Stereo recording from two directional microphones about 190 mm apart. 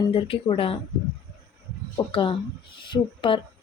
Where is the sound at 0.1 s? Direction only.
30° left (ahead or behind).